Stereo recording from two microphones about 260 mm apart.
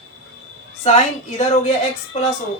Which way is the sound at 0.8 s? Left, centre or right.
Left.